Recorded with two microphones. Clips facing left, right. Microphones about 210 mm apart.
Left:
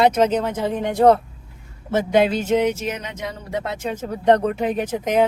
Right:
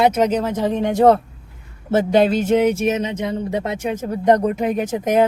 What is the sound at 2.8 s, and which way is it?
Speech, 25° right (ahead or behind).